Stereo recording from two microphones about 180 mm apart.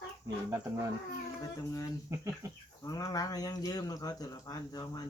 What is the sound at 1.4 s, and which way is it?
Speech, 20° left (ahead or behind).